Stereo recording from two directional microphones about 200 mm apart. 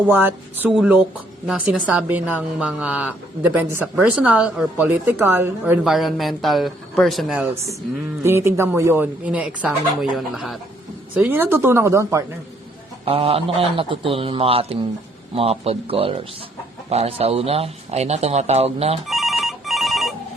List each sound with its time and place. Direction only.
0.0 s a woman's voice: 10° right (ahead or behind)
8.2 s a woman's voice: 10° right (ahead or behind)
13.1 s a man's voice: 30° right (ahead or behind)
19.0 s telephone bell ringing: centre (ahead or behind)